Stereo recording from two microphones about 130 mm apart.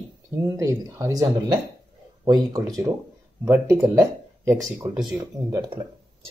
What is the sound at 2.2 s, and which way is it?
Speech, 30° right (ahead or behind).